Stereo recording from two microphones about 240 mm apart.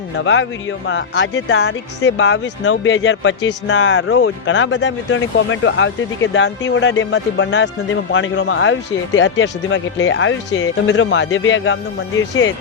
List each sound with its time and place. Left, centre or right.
0.2 s speech: left